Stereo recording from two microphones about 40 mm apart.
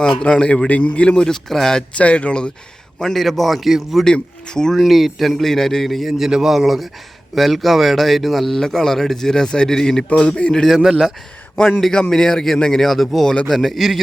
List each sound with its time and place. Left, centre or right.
0.0 s a man's voice: left
2.0 s speech: left
3.0 s a man's voice: centre
4.0 s speech: centre
4.8 s a man's voice: centre
6.1 s a man's voice: centre
10.1 s speech: left
11.9 s a man's voice: left; by 13.2 s centre
13.2 s speech: left
13.5 s a man's voice: centre